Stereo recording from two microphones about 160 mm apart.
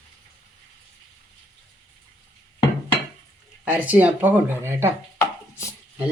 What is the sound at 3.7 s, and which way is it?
Speech, 10° right (ahead or behind).